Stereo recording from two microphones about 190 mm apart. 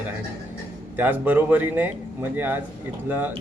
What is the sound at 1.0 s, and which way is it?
Speech, 10° right (ahead or behind).